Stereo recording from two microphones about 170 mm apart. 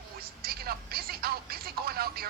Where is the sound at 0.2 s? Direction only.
60° right (ahead or behind).